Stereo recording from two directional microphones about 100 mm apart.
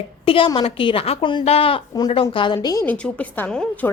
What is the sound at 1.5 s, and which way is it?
Speech, 70° left (ahead or behind).